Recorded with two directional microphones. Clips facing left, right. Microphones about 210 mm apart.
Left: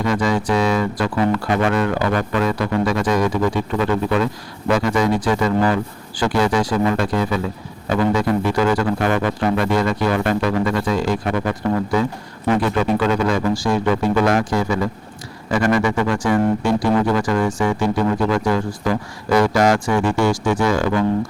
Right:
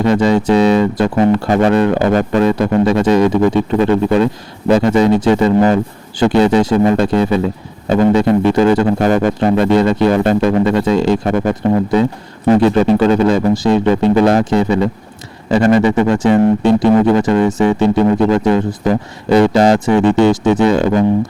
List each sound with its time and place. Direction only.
0.0 s speech: 25° right (ahead or behind)
1.5 s speech: 35° right (ahead or behind)